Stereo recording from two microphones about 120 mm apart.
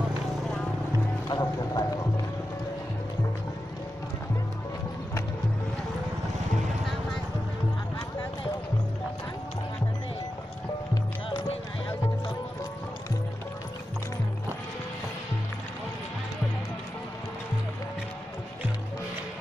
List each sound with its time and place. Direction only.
1.3 s clip-clop: 30° left (ahead or behind)